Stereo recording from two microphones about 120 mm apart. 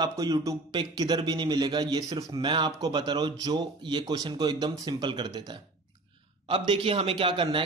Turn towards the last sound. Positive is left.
turn(degrees=-45)  # may be behind; listen again after turning